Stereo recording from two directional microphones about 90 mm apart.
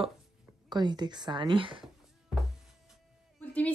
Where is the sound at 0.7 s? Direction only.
55° right (ahead or behind); by 1.8 s 70° right (ahead or behind).